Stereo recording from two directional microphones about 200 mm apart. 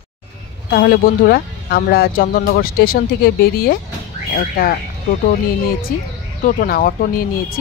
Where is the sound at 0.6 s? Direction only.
50° left (ahead or behind).